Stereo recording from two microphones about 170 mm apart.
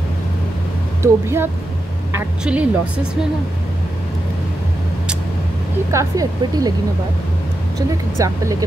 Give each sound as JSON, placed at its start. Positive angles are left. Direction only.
{"t": 1.0, "sound": "speech", "side_deg": -15}
{"t": 5.9, "sound": "speech", "side_deg": -20}
{"t": 8.2, "sound": "speech", "side_deg": -20}